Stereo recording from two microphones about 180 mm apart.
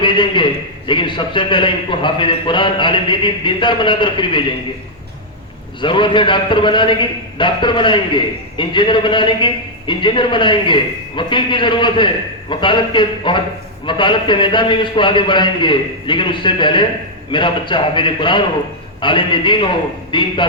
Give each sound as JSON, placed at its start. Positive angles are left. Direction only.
{"t": 0.0, "sound": "a man's voice", "side_deg": 25}
{"t": 5.8, "sound": "a man's voice", "side_deg": 25}